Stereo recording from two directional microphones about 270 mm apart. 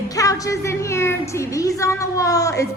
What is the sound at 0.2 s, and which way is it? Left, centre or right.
A woman's voice, centre.